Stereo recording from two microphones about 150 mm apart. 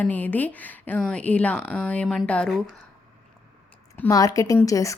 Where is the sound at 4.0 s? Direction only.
25° left (ahead or behind).